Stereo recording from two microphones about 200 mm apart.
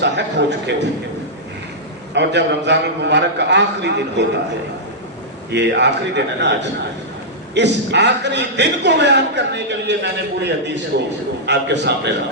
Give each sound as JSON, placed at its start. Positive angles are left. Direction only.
{"t": 0.0, "sound": "a man's voice", "side_deg": -60}
{"t": 2.1, "sound": "a man's voice", "side_deg": -60}
{"t": 5.5, "sound": "a man's voice", "side_deg": -60}